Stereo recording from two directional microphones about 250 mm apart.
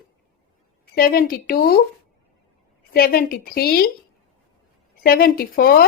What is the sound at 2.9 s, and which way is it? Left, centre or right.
Speech, left.